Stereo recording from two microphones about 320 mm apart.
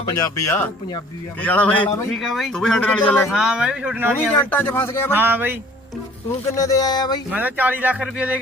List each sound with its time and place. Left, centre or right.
0.4 s speech: centre
4.4 s speech: centre
5.1 s speech: centre
6.5 s speech: centre
7.3 s speech: centre